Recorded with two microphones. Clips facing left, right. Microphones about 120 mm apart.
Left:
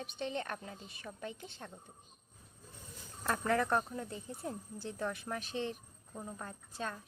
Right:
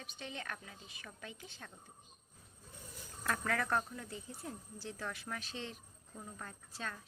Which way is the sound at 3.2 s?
25° left (ahead or behind).